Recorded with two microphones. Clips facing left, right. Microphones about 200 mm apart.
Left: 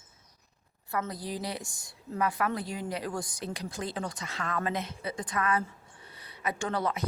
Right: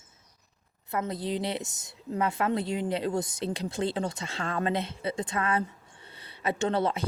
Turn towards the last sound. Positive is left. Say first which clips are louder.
# right 4 dB
turn(degrees=-25)  # may be behind; listen again after turning